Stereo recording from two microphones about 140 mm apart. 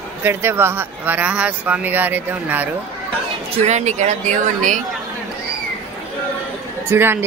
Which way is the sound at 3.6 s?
55° right (ahead or behind).